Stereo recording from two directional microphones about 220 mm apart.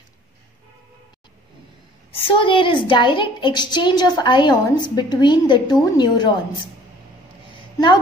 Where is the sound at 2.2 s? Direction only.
25° left (ahead or behind).